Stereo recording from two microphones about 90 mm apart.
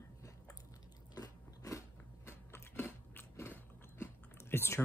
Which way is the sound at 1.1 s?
40° left (ahead or behind).